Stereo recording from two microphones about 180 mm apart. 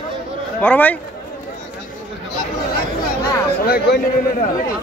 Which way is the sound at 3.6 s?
60° left (ahead or behind).